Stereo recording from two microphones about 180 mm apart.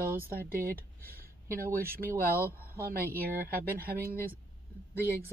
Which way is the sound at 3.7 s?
55° right (ahead or behind).